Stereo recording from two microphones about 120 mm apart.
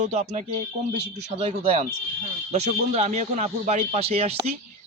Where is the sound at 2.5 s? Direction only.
65° right (ahead or behind).